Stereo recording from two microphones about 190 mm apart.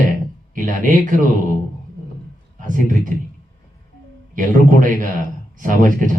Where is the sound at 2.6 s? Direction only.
45° right (ahead or behind).